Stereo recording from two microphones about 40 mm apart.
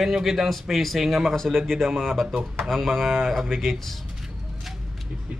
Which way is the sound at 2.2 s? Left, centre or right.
Centre.